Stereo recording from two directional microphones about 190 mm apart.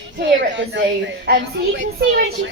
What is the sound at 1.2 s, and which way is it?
A woman's voice, 55° right (ahead or behind).